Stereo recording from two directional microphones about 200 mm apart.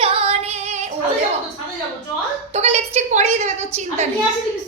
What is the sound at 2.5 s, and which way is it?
A woman's voice, 35° right (ahead or behind).